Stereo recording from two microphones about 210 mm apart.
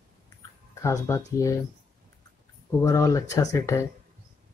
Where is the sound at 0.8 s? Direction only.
15° left (ahead or behind).